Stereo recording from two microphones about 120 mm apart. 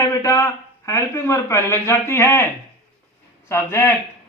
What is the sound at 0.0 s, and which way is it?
A man's voice, 25° left (ahead or behind).